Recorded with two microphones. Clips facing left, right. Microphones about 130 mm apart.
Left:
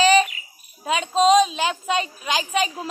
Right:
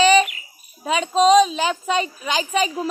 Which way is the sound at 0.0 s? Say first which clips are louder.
Right 2 dB; centre (ahead or behind).